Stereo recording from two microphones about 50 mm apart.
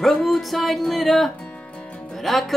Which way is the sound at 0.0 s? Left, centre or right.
Centre.